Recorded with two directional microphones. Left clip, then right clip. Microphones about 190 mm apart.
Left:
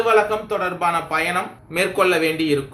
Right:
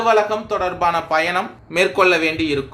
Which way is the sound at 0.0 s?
40° right (ahead or behind).